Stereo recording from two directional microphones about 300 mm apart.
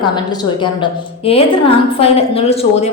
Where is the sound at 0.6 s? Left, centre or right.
Centre.